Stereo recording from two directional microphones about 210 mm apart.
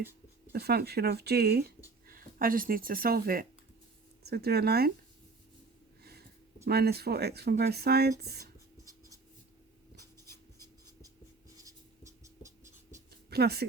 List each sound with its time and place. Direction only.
0.5 s speech: 50° right (ahead or behind)
6.0 s a sound: 50° right (ahead or behind)
6.7 s speech: 50° right (ahead or behind)
8.2 s writing: 50° right (ahead or behind)
10.6 s writing: 15° right (ahead or behind)
13.1 s a sound: 50° right (ahead or behind)